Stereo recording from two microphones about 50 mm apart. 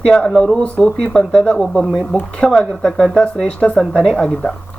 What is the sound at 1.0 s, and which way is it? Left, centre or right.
Speech, centre.